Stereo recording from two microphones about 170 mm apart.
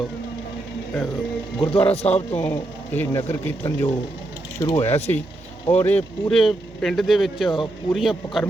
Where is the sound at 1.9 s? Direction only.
35° left (ahead or behind).